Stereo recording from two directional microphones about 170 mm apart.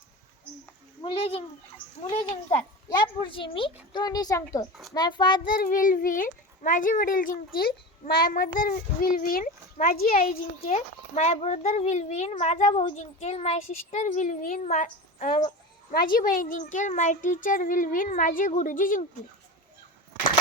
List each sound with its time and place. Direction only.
1.0 s a sound: 35° left (ahead or behind)
2.9 s speech: 25° left (ahead or behind)
5.5 s a child's voice: 55° left (ahead or behind)
15.3 s speech: 25° left (ahead or behind)
15.9 s a child's voice: 60° left (ahead or behind)